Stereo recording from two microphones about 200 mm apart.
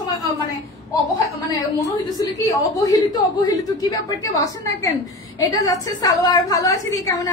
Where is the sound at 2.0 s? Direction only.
15° left (ahead or behind).